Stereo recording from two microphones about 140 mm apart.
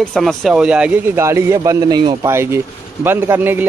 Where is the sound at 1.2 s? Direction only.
20° right (ahead or behind).